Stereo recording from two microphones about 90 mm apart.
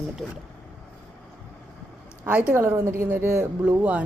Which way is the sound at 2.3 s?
15° right (ahead or behind).